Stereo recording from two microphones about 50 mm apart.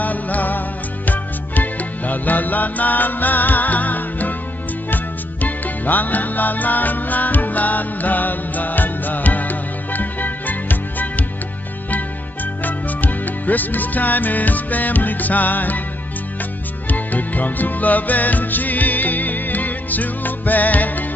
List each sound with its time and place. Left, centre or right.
0.0 s music: left
12.6 s music: left
16.9 s music: left